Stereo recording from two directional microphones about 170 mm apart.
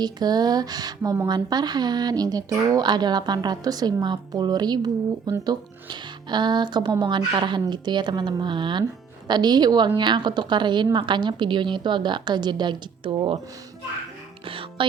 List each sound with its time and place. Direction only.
0.0 s speech: 25° right (ahead or behind)
14.4 s music: 30° right (ahead or behind)